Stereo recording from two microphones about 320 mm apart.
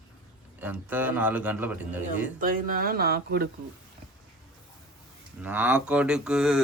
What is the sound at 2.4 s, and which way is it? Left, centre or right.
Speech, right.